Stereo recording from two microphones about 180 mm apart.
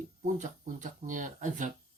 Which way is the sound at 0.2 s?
40° right (ahead or behind).